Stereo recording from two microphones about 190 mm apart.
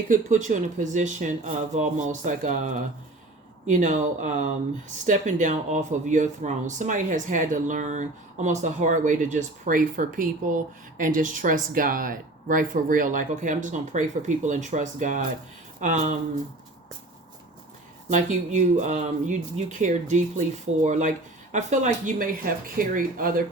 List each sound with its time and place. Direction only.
0.1 s speech: 40° right (ahead or behind)
18.1 s speech: 40° right (ahead or behind)